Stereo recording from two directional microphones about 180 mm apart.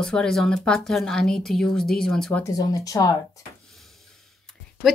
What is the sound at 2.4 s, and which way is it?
Speech, 20° left (ahead or behind).